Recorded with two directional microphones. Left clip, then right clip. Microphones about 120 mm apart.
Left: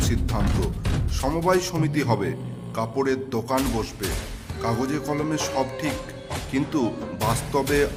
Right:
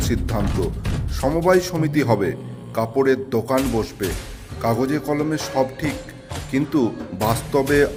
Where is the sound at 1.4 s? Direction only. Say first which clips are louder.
Right 4 dB; 30° right (ahead or behind).